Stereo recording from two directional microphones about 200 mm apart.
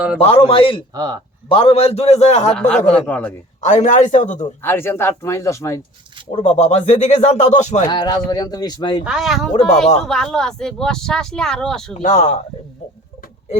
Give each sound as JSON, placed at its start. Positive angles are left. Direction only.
{"t": 0.2, "sound": "speech", "side_deg": 30}
{"t": 0.9, "sound": "speech", "side_deg": -20}
{"t": 1.5, "sound": "speech", "side_deg": 30}
{"t": 2.6, "sound": "speech", "side_deg": 5}
{"t": 3.6, "sound": "speech", "side_deg": 35}
{"t": 4.6, "sound": "speech", "side_deg": 10}
{"t": 6.4, "sound": "speech", "side_deg": 35}
{"t": 7.9, "sound": "speech", "side_deg": 20}
{"t": 9.0, "sound": "speech", "side_deg": 0}
{"t": 12.0, "sound": "speech", "side_deg": 35}